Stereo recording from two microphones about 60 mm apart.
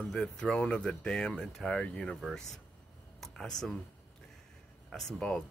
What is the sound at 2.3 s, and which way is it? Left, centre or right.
Speech, centre.